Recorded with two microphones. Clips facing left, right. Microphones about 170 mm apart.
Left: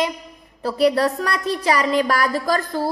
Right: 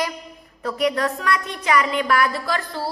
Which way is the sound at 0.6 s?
30° left (ahead or behind).